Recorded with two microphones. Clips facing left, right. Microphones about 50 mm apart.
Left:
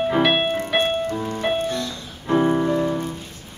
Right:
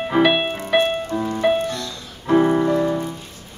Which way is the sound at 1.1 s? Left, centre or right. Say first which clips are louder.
Right 3 dB; centre.